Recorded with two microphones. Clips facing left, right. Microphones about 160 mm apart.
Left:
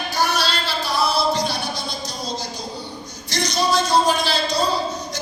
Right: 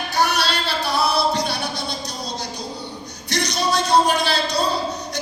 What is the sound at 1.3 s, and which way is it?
Music, 65° right (ahead or behind).